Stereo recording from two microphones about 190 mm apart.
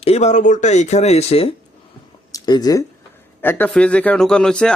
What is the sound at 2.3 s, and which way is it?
Speech, 20° left (ahead or behind).